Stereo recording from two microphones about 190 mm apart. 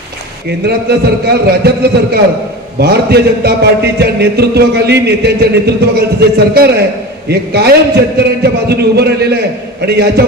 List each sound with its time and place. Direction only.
0.8 s music: 55° right (ahead or behind)